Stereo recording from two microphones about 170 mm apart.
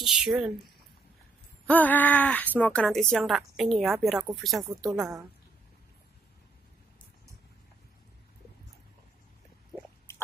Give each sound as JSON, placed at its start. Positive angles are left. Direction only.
{"t": 0.0, "sound": "speech", "side_deg": -5}
{"t": 1.7, "sound": "speech", "side_deg": 10}
{"t": 9.7, "sound": "a sound", "side_deg": -5}
{"t": 10.1, "sound": "rodents", "side_deg": 15}